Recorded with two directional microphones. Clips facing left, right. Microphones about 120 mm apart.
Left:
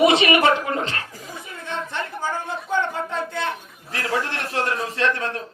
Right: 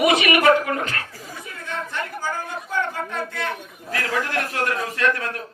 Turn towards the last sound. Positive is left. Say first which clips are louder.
# even
turn(degrees=25)  # may be behind; listen again after turning